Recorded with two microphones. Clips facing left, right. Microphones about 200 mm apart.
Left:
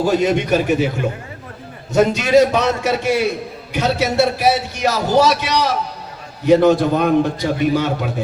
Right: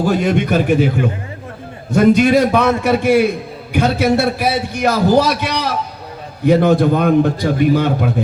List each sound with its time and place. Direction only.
0.0 s a man's voice: 55° right (ahead or behind)